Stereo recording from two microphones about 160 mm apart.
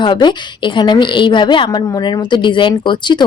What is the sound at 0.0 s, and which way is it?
A woman's voice, 30° left (ahead or behind).